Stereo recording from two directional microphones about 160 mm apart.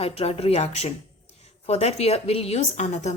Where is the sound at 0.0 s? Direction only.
40° left (ahead or behind).